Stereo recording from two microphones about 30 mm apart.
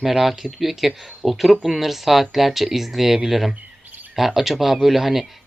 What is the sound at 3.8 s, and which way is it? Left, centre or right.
Chirp, right.